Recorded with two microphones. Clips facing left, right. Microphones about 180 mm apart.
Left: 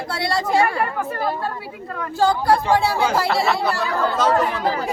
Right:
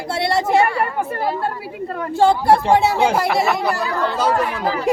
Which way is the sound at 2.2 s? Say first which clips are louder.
Right 3 dB; 25° right (ahead or behind).